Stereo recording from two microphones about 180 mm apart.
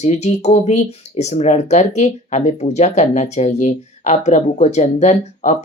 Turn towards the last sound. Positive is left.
turn(degrees=40)  # may be behind; listen again after turning